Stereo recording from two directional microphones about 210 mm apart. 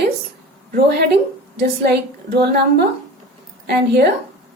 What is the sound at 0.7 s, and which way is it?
A woman's voice, 50° right (ahead or behind).